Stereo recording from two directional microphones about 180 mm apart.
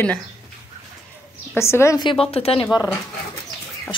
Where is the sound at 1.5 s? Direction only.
15° left (ahead or behind).